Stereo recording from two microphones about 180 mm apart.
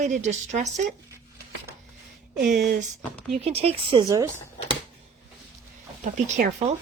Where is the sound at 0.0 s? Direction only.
40° right (ahead or behind).